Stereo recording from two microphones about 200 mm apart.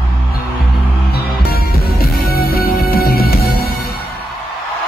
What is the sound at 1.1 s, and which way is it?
Music, 50° left (ahead or behind).